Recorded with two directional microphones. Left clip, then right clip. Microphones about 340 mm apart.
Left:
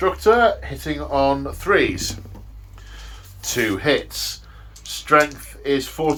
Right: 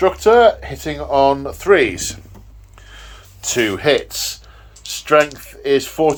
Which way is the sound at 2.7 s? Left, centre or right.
Centre.